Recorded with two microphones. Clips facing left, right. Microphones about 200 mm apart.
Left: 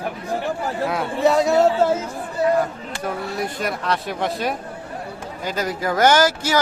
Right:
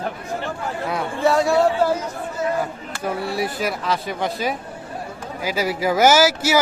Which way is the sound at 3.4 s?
5° right (ahead or behind).